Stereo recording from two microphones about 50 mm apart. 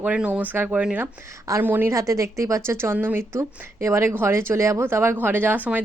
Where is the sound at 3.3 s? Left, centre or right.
Right.